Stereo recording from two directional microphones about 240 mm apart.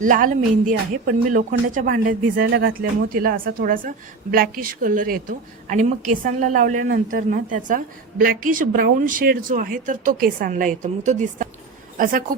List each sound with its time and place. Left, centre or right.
0.0 s a woman's voice: right